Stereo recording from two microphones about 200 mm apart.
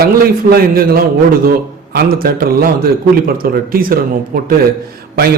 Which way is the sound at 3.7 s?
45° right (ahead or behind).